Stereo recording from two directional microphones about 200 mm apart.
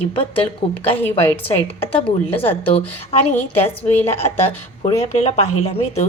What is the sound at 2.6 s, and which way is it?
Speech, 30° left (ahead or behind).